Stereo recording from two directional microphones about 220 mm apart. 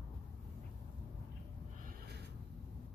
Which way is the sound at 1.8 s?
40° right (ahead or behind).